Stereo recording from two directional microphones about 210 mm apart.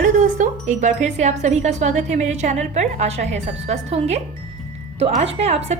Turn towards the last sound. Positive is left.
turn(degrees=-30)  # may be behind; listen again after turning